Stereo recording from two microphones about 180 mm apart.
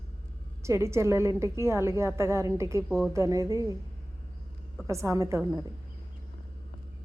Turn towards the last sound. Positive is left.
turn(degrees=-15)  # may be behind; listen again after turning